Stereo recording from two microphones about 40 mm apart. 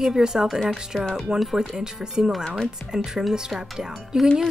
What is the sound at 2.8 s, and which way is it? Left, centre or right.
Speech, left.